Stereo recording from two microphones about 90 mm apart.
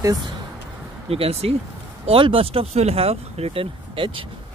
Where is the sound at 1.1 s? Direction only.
90° right.